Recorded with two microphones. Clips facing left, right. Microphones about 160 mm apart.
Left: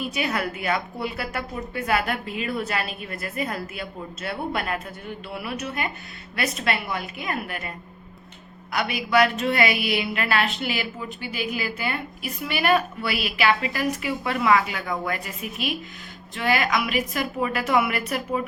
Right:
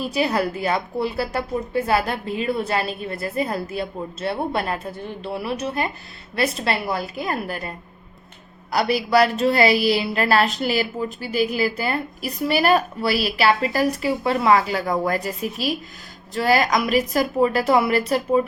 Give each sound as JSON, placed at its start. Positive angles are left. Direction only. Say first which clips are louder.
{"t": 0.0, "sound": "a woman's voice", "louder": "right 5 dB", "side_deg": -35}
{"t": 8.7, "sound": "a woman's voice", "louder": "right 4 dB", "side_deg": -35}